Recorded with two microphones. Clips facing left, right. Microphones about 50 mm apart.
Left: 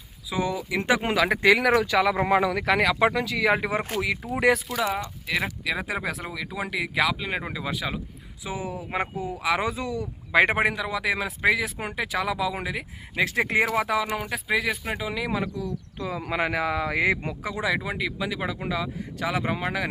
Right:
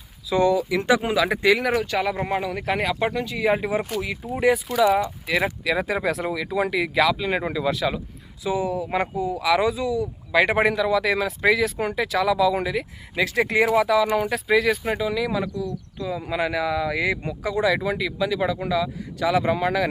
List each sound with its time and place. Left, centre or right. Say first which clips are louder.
0.3 s speech: right 8 dB; centre
1.0 s speech: right 1 dB; left
1.5 s speech: left 3 dB; left
3.5 s speech: right 3 dB; left
4.4 s speech: right 2 dB; left
4.9 s speech: right 7 dB; centre
5.6 s speech: right 5 dB; centre
8.4 s speech: right 8 dB; left
10.5 s a man's voice: right 5 dB; centre
13.1 s speech: right 2 dB; left
14.2 s speech: right 6 dB; centre
14.8 s speech: right 5 dB; centre
16.0 s speech: right 2 dB; left
17.4 s speech: right 7 dB; centre